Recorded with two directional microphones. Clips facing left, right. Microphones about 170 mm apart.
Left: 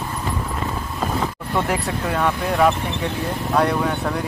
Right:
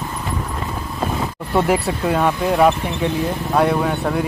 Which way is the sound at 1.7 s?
15° right (ahead or behind).